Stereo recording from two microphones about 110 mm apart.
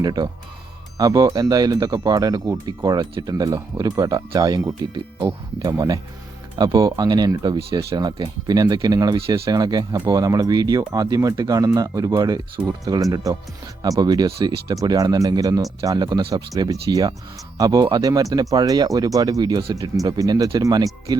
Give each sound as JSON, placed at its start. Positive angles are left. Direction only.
{"t": 0.0, "sound": "speech", "side_deg": -35}